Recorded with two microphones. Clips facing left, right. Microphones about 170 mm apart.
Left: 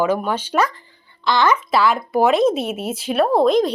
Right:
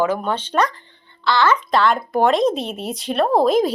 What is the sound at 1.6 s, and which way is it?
Speech, 5° left (ahead or behind).